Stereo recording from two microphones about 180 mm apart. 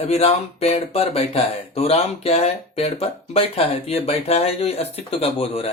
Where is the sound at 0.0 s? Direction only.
35° left (ahead or behind).